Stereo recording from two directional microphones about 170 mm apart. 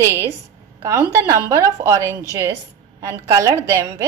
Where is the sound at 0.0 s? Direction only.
15° right (ahead or behind).